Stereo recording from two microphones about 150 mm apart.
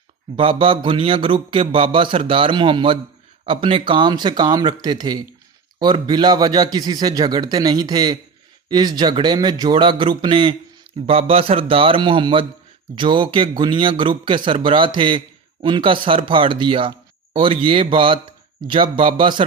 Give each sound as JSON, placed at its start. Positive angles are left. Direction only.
{"t": 0.4, "sound": "a man's voice", "side_deg": -35}